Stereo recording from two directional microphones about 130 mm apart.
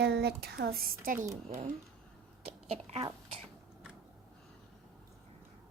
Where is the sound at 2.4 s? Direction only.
50° right (ahead or behind).